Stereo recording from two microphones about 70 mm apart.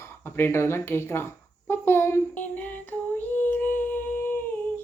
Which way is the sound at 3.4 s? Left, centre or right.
Left.